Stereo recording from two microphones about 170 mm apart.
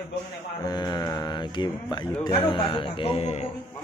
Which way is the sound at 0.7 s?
25° left (ahead or behind).